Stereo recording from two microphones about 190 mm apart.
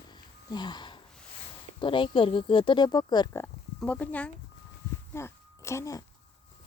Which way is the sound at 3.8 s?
5° left (ahead or behind).